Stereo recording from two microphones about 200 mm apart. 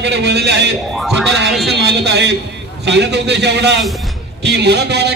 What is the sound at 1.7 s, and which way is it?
A man's voice, 60° right (ahead or behind).